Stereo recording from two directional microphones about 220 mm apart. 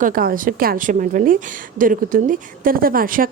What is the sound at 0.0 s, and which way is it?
A woman's voice, 40° right (ahead or behind).